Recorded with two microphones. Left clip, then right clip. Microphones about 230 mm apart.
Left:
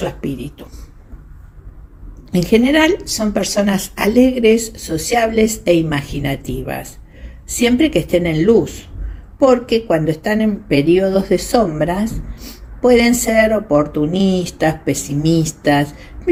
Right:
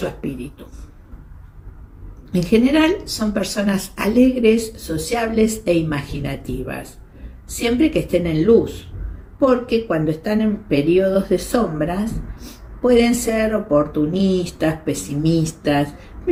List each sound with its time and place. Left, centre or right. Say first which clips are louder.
0.2 s speech: left 4 dB; left
2.3 s speech: left 3 dB; left